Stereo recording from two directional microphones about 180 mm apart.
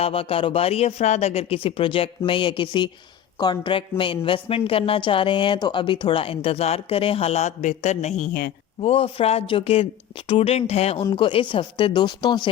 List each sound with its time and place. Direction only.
0.0 s a woman's voice: 30° left (ahead or behind)